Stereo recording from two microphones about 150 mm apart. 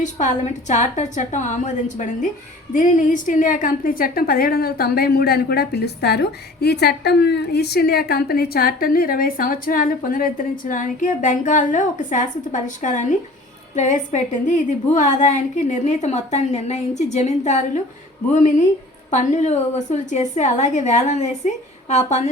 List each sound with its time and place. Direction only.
0.0 s a woman's voice: 55° left (ahead or behind)